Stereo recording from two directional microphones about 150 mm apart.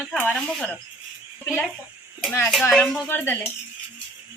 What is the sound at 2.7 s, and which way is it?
Speech, 5° left (ahead or behind).